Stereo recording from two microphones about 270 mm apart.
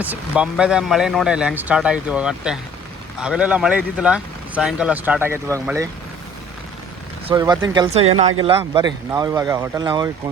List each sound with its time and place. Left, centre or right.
0.0 s speech: centre
7.3 s speech: centre